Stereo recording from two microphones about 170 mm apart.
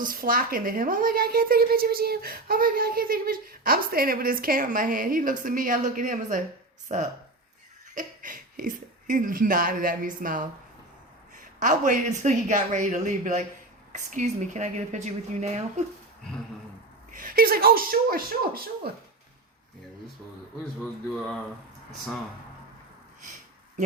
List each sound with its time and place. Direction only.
0.0 s a woman's voice: 55° right (ahead or behind)
11.6 s speech: 50° right (ahead or behind)
17.2 s a woman's voice: 55° right (ahead or behind)
23.2 s a sound: 45° right (ahead or behind)